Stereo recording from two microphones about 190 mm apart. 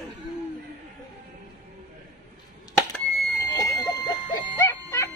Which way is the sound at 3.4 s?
15° left (ahead or behind).